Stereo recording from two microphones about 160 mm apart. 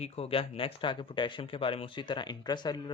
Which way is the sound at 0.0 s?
35° left (ahead or behind).